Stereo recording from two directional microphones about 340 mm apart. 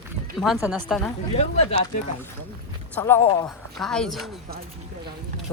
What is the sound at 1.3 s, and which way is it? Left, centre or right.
Speech, centre.